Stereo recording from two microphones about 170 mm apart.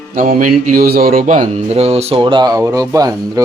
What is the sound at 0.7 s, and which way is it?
Speech, 60° right (ahead or behind).